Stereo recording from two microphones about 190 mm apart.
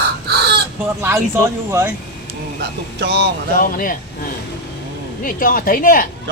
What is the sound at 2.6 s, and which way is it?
Speech, 60° right (ahead or behind).